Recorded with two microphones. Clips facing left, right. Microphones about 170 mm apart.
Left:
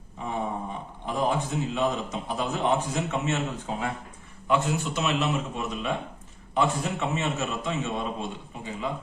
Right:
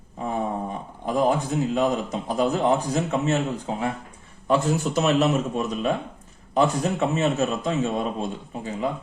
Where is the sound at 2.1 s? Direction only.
40° right (ahead or behind).